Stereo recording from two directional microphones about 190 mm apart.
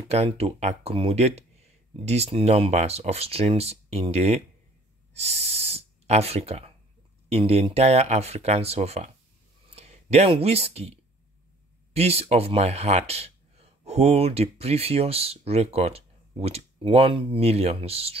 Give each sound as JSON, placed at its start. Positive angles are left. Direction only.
{"t": 0.1, "sound": "speech", "side_deg": -35}